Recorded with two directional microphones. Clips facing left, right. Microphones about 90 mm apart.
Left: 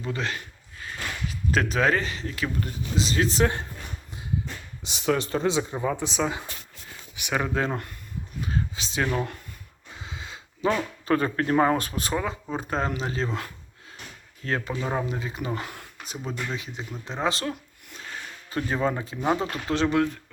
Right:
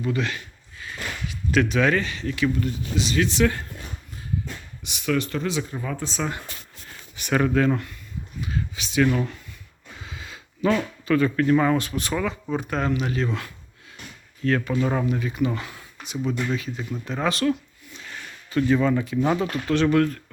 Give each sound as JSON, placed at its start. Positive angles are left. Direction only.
{"t": 0.0, "sound": "speech", "side_deg": 30}
{"t": 4.8, "sound": "speech", "side_deg": 30}
{"t": 5.8, "sound": "speech", "side_deg": 15}
{"t": 7.5, "sound": "speech", "side_deg": 25}
{"t": 8.4, "sound": "a sound", "side_deg": 35}
{"t": 11.0, "sound": "speech", "side_deg": 40}
{"t": 14.8, "sound": "speech", "side_deg": 20}
{"t": 18.5, "sound": "speech", "side_deg": 35}